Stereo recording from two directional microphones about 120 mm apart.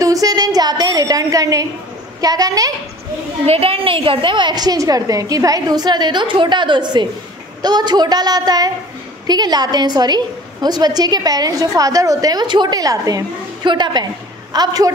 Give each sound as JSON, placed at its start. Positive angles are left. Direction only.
{"t": 0.0, "sound": "a sound", "side_deg": -30}
{"t": 2.2, "sound": "a woman's voice", "side_deg": -30}
{"t": 3.4, "sound": "a woman's voice", "side_deg": -55}